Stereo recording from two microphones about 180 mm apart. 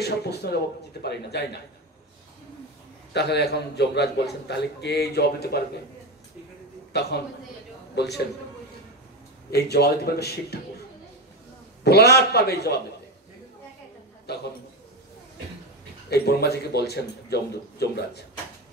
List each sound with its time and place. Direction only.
0.0 s a man's voice: 65° left (ahead or behind)
3.1 s a man's voice: 70° left (ahead or behind)
6.9 s a man's voice: 65° left (ahead or behind)
9.5 s a man's voice: 60° left (ahead or behind)
11.8 s a man's voice: 65° left (ahead or behind)
16.1 s a man's voice: 60° left (ahead or behind)